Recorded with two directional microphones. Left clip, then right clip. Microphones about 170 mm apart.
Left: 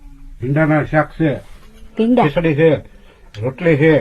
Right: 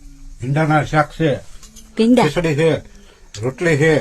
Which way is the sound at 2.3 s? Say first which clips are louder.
Left 3 dB; 30° right (ahead or behind).